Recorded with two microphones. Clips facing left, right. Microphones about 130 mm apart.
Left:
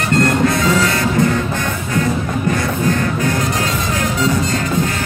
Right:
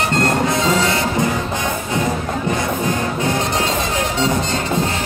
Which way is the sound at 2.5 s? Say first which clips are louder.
Left 1 dB; 20° right (ahead or behind).